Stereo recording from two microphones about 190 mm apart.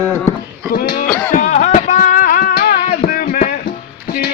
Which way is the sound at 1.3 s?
40° left (ahead or behind).